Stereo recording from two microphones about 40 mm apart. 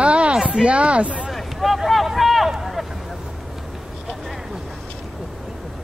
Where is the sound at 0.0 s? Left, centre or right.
Right.